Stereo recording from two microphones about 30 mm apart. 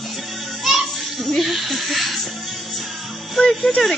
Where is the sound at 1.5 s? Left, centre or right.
Centre.